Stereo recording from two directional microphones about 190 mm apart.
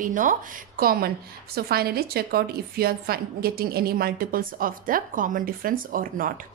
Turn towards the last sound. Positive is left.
turn(degrees=-45)  # may be behind; listen again after turning